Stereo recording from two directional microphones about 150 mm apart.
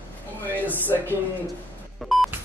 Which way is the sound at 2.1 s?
Centre (ahead or behind).